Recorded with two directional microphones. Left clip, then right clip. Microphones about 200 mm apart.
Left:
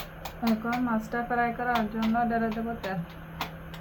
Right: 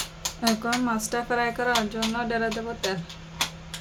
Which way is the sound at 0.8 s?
70° right (ahead or behind).